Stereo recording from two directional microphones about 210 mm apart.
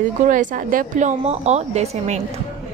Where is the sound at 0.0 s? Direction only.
40° right (ahead or behind).